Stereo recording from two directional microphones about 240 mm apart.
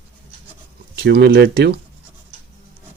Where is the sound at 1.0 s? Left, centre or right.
Right.